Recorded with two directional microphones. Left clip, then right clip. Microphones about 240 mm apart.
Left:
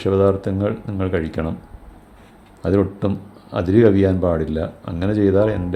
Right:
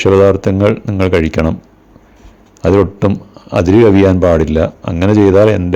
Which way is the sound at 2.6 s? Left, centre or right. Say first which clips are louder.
Right 9 dB; right.